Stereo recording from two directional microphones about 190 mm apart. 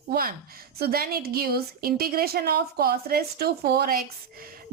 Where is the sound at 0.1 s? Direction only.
50° right (ahead or behind).